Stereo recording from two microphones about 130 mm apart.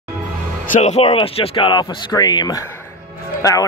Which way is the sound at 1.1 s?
45° left (ahead or behind).